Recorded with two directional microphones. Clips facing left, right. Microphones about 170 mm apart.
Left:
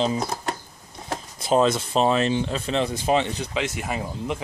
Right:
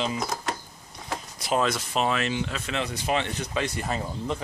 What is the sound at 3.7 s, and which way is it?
Speech, 10° left (ahead or behind).